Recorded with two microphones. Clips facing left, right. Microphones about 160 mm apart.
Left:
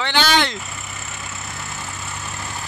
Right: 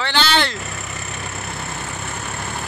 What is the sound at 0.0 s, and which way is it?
Vehicle, 15° left (ahead or behind).